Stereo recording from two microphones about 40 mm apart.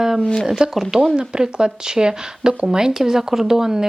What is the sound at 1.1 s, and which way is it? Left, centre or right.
Speech, centre.